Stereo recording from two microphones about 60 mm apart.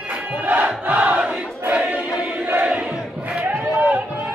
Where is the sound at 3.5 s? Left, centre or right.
Right.